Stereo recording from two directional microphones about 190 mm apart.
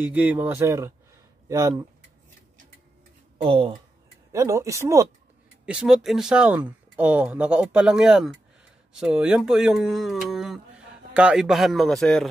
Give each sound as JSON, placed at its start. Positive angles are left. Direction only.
{"t": 0.0, "sound": "speech", "side_deg": -10}
{"t": 3.4, "sound": "speech", "side_deg": -30}
{"t": 4.3, "sound": "speech", "side_deg": -15}
{"t": 5.7, "sound": "speech", "side_deg": -5}